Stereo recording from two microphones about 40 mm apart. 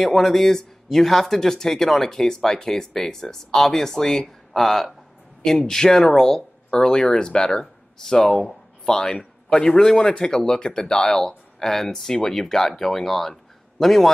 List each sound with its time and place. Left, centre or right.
0.0 s a man's voice: centre
11.1 s speech: centre